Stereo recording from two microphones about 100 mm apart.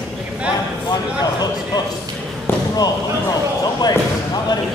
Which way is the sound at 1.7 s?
45° left (ahead or behind).